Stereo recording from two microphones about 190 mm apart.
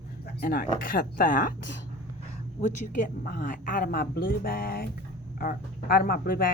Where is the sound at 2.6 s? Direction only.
45° left (ahead or behind).